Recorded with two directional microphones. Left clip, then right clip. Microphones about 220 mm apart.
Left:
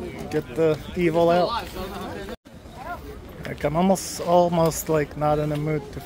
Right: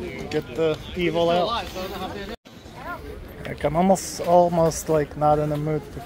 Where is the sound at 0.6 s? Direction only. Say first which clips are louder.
Left 2 dB; 30° left (ahead or behind).